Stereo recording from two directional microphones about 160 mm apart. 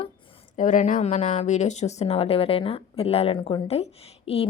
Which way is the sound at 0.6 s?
50° left (ahead or behind).